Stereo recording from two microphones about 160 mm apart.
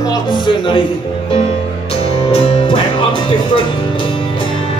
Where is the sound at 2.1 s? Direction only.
35° left (ahead or behind).